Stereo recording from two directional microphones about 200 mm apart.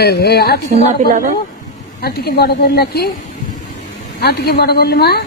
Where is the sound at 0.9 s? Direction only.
40° right (ahead or behind).